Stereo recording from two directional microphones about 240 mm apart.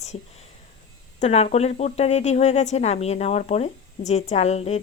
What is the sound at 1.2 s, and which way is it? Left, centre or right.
Speech, left.